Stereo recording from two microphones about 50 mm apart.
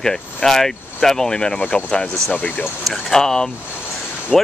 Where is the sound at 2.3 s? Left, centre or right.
Left.